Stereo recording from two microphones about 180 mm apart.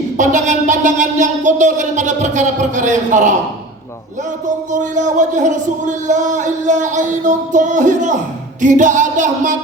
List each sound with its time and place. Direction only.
0.2 s music: 45° right (ahead or behind)
4.4 s music: 45° right (ahead or behind)